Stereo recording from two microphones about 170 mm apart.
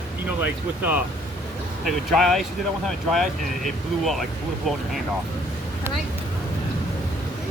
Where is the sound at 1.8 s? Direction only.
Centre (ahead or behind).